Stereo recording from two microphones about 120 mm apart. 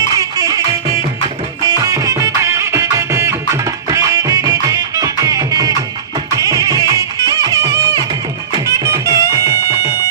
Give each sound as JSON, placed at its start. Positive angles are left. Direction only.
{"t": 0.0, "sound": "music", "side_deg": -30}
{"t": 1.6, "sound": "music", "side_deg": -30}